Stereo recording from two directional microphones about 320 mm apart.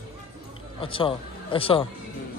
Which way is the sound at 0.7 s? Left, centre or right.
Centre.